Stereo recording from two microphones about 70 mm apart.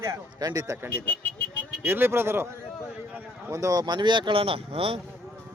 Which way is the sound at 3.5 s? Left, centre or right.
Right.